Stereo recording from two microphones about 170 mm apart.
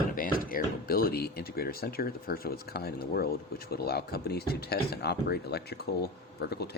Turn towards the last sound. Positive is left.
turn(degrees=75)  # may be behind; listen again after turning